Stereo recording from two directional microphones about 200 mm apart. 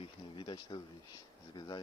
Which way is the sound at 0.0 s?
25° left (ahead or behind).